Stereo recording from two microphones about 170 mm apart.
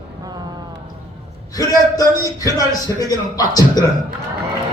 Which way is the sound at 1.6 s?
20° left (ahead or behind).